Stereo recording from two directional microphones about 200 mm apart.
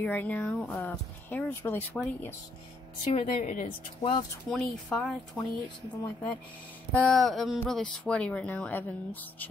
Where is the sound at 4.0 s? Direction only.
25° left (ahead or behind).